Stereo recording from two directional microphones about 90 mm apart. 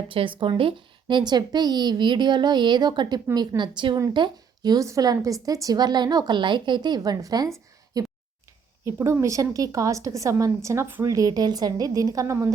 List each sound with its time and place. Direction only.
0.1 s a woman's voice: 70° right (ahead or behind); by 4.9 s 50° right (ahead or behind)
4.9 s a woman's voice: 35° right (ahead or behind)
7.9 s a sound: 40° right (ahead or behind)
8.8 s a woman's voice: 30° right (ahead or behind)
11.0 s a woman's voice: 40° right (ahead or behind)